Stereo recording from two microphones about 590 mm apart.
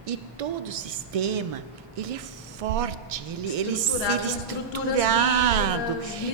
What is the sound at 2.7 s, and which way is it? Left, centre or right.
Speech, right.